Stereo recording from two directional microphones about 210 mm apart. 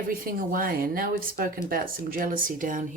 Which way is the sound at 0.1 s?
45° right (ahead or behind).